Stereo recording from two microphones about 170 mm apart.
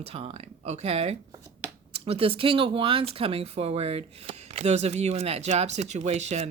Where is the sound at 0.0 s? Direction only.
35° right (ahead or behind).